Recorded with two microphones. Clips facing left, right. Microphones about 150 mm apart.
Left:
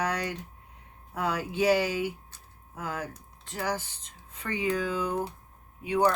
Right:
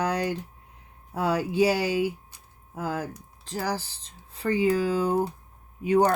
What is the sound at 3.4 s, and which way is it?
Speech, 35° right (ahead or behind).